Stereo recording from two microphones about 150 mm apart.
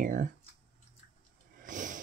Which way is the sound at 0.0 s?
65° right (ahead or behind).